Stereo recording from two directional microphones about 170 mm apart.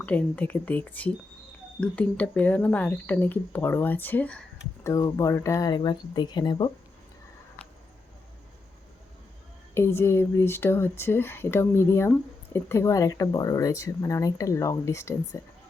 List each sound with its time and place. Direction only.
0.0 s speech: 10° left (ahead or behind)
4.8 s speech: 20° left (ahead or behind)
9.7 s speech: 15° left (ahead or behind)